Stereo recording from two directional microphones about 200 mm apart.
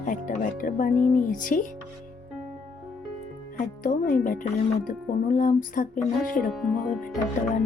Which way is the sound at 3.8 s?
45° left (ahead or behind).